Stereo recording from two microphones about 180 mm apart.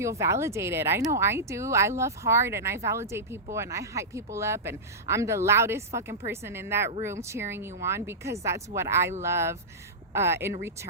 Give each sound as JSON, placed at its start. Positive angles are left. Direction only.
{"t": 0.0, "sound": "speech", "side_deg": -15}